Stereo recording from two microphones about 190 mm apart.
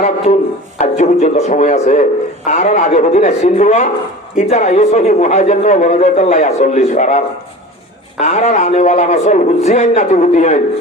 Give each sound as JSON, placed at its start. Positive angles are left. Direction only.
{"t": 0.3, "sound": "a man's voice", "side_deg": 35}
{"t": 8.2, "sound": "a man's voice", "side_deg": 40}